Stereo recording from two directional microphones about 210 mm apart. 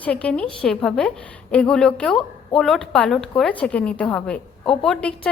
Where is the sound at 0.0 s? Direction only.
5° left (ahead or behind).